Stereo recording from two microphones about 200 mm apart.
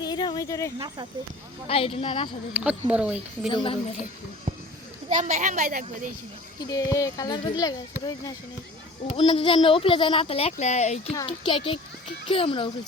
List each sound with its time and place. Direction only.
0.0 s a sound: 20° left (ahead or behind)
1.6 s speech: 30° left (ahead or behind)
2.5 s speech: 5° right (ahead or behind)
3.5 s speech: 25° left (ahead or behind)
4.5 s children playing: 35° right (ahead or behind)
5.0 s a child's voice: 35° right (ahead or behind)
6.6 s speech: 15° left (ahead or behind)
9.1 s speech: 25° left (ahead or behind)